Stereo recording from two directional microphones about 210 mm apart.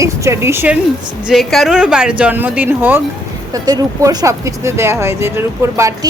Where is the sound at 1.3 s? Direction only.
Centre (ahead or behind).